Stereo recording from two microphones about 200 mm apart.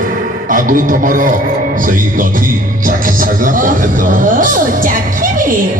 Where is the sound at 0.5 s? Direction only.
45° right (ahead or behind).